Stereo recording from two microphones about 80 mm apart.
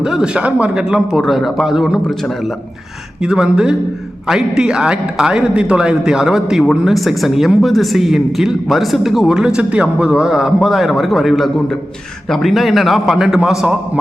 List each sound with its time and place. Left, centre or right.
0.0 s a man's voice: centre
3.2 s a man's voice: centre